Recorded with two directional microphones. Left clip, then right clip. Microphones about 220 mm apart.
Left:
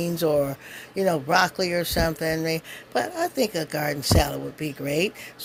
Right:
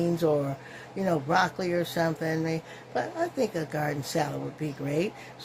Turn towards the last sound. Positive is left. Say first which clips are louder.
# left 5 dB
turn(degrees=40)  # may be behind; listen again after turning